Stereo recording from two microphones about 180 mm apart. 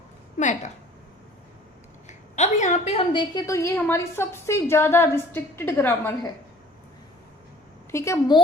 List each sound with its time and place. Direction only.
0.3 s a woman's voice: 40° left (ahead or behind)
2.0 s a woman's voice: 40° left (ahead or behind)
3.1 s a woman's voice: 25° left (ahead or behind)
7.9 s a woman's voice: 15° left (ahead or behind)